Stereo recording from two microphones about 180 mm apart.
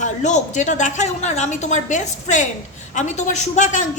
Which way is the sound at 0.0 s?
45° left (ahead or behind).